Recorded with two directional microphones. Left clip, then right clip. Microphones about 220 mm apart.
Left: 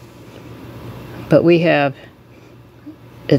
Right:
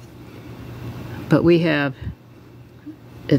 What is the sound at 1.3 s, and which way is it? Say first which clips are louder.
Speech: left 5 dB; 20° right (ahead or behind).